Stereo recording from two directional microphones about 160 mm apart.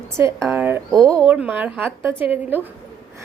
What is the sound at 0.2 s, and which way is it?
A woman's voice, 15° right (ahead or behind).